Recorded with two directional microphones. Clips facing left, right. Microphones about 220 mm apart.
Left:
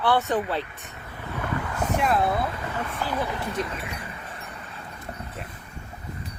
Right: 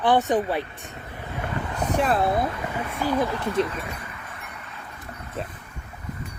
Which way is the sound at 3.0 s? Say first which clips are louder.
Right 6 dB; 15° right (ahead or behind).